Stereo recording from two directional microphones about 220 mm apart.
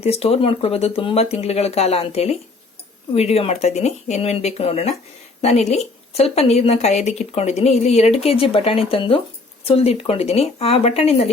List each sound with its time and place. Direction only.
0.0 s speech: 30° left (ahead or behind)